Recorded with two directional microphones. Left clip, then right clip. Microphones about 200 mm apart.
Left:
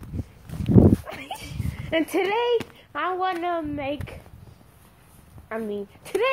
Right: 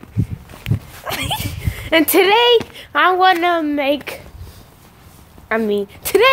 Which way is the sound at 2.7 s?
40° right (ahead or behind).